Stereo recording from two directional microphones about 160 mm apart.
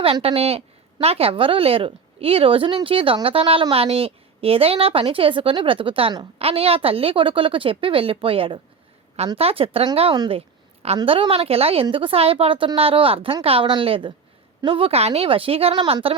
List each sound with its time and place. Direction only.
0.0 s a woman's voice: 35° right (ahead or behind)